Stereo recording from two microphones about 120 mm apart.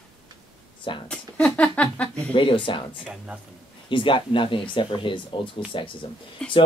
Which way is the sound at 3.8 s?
45° left (ahead or behind).